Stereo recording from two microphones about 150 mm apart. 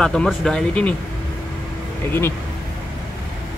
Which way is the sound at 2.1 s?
15° left (ahead or behind).